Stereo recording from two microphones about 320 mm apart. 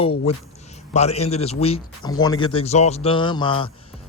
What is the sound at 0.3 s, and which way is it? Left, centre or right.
A man's voice, centre.